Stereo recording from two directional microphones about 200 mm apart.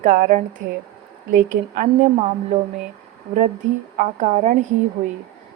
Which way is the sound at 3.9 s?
40° right (ahead or behind).